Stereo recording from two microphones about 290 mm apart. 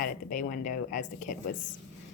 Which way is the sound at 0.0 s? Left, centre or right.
Left.